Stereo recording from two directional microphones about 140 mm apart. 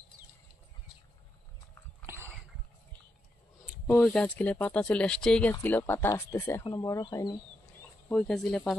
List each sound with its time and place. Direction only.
4.0 s speech: 5° left (ahead or behind); by 7.3 s 30° left (ahead or behind)
8.1 s speech: 5° left (ahead or behind)